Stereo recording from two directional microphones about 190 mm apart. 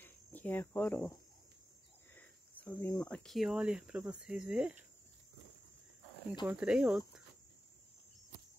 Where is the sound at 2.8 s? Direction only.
15° left (ahead or behind).